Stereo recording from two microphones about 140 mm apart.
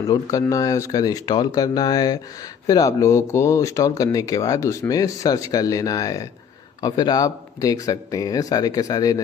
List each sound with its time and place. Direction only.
0.0 s speech: 25° left (ahead or behind)